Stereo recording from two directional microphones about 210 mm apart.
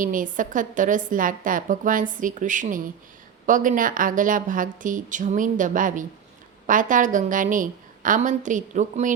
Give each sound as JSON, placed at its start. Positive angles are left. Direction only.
{"t": 0.0, "sound": "a woman's voice", "side_deg": -40}